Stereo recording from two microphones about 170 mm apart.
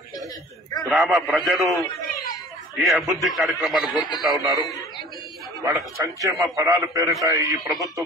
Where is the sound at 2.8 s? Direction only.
Centre (ahead or behind).